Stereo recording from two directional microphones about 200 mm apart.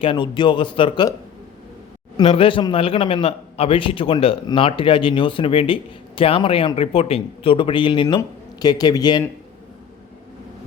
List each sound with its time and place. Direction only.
0.0 s a man's voice: 25° left (ahead or behind)
2.1 s a man's voice: 25° left (ahead or behind)